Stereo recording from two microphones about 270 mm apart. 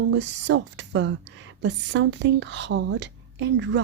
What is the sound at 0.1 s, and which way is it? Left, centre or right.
Speech, right.